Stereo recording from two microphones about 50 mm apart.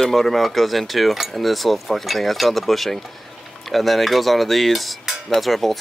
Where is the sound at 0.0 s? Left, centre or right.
Centre.